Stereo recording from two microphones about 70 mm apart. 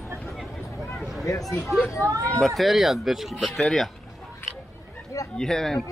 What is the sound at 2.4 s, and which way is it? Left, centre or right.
Speech, centre.